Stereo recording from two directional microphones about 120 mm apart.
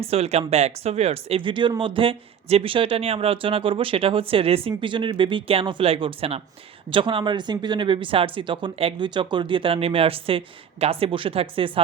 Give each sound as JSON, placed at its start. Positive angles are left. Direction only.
{"t": 0.0, "sound": "speech", "side_deg": -55}